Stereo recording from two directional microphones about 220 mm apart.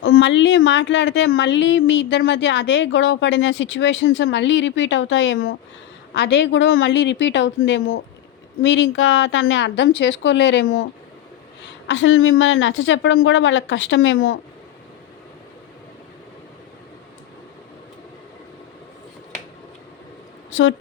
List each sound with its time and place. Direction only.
0.0 s speech: 60° left (ahead or behind)
6.1 s a woman's voice: 50° left (ahead or behind)
11.9 s speech: 60° left (ahead or behind)
20.5 s speech: 60° left (ahead or behind)